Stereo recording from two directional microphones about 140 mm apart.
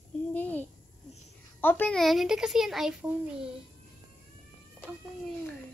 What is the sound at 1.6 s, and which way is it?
A woman's voice, 15° left (ahead or behind).